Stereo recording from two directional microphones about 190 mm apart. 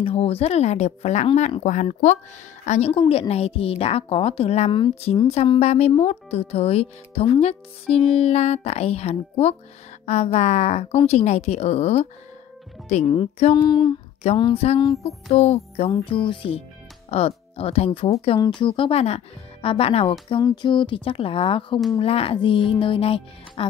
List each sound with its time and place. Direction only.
0.0 s a woman's voice: 30° left (ahead or behind)